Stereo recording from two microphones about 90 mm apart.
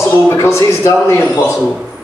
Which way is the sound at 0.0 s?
30° left (ahead or behind).